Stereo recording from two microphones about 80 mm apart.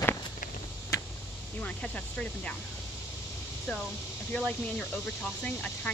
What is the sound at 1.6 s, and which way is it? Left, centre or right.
Speech, centre.